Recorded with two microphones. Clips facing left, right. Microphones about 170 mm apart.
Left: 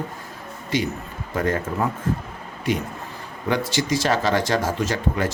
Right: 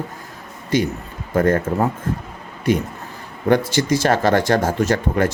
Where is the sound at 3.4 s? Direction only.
50° right (ahead or behind).